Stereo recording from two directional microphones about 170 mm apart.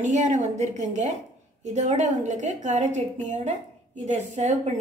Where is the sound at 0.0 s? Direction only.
45° right (ahead or behind).